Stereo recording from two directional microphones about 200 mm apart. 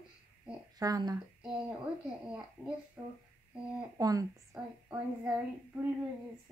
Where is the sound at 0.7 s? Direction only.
20° right (ahead or behind).